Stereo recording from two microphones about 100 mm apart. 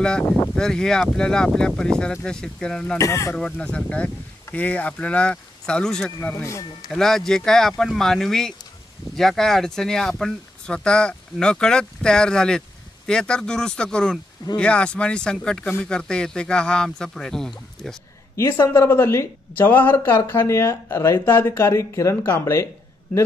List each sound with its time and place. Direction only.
0.6 s speech: 5° left (ahead or behind)
3.0 s speech: 35° left (ahead or behind)
3.3 s speech: 10° left (ahead or behind)
6.3 s speech: 30° left (ahead or behind)
6.9 s speech: 5° left (ahead or behind)
18.3 s speech: 30° left (ahead or behind)